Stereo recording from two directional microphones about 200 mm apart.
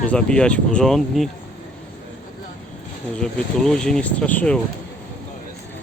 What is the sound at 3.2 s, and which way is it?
Speech, 5° left (ahead or behind).